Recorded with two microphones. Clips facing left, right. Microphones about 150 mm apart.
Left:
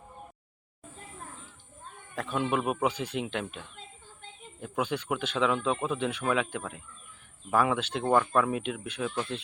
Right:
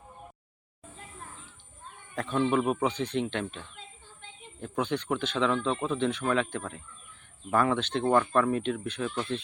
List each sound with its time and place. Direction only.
2.1 s speech: 5° left (ahead or behind)